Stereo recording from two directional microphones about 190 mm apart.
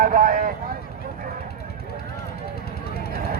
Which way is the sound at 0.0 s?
45° right (ahead or behind).